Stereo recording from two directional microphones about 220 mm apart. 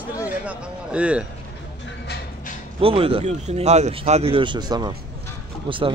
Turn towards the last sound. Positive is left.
turn(degrees=-25)  # may be behind; listen again after turning